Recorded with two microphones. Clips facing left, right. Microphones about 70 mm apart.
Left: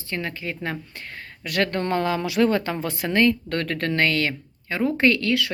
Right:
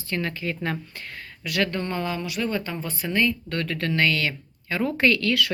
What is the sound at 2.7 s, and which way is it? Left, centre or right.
Speech, left.